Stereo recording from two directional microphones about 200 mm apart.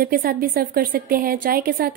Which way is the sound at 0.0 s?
45° right (ahead or behind).